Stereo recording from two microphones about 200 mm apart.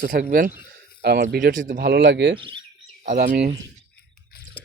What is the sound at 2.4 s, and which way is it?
Speech, 25° right (ahead or behind).